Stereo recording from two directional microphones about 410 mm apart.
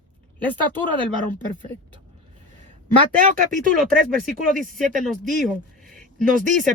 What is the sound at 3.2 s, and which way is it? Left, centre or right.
Speech, centre.